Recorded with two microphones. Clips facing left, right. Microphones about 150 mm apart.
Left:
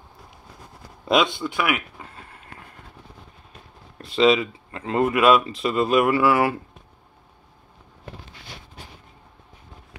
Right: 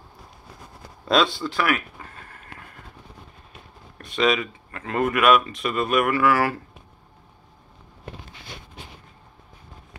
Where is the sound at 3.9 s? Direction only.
25° left (ahead or behind).